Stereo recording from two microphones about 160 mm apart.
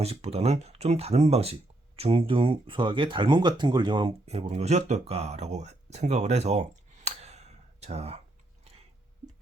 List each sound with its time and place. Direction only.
0.0 s speech: 40° right (ahead or behind)